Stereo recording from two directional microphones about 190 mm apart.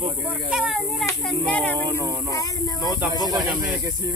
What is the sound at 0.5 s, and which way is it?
A child's voice, centre (ahead or behind).